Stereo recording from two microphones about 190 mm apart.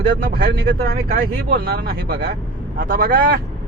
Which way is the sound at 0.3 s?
55° right (ahead or behind).